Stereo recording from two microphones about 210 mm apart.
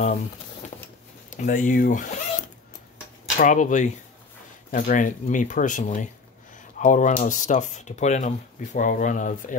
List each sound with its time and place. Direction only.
0.0 s speech: 35° left (ahead or behind)
3.3 s speech: 40° left (ahead or behind)